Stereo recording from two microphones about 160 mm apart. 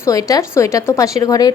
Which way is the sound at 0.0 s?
20° left (ahead or behind).